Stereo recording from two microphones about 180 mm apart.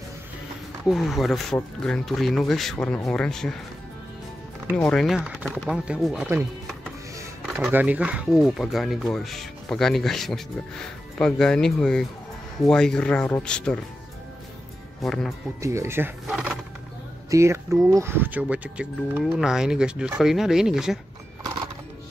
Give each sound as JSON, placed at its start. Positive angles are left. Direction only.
{"t": 0.8, "sound": "speech", "side_deg": 0}
{"t": 4.7, "sound": "speech", "side_deg": 5}
{"t": 7.4, "sound": "speech", "side_deg": -5}
{"t": 15.0, "sound": "speech", "side_deg": 0}
{"t": 15.6, "sound": "speech", "side_deg": -15}
{"t": 16.3, "sound": "a sound", "side_deg": -5}
{"t": 17.3, "sound": "speech", "side_deg": -15}